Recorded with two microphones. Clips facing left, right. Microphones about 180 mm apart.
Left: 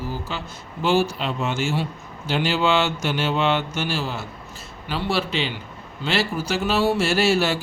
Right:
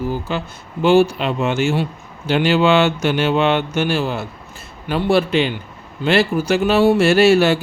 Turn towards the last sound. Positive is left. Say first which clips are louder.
# right 8 dB
turn(degrees=-60)  # may be behind; listen again after turning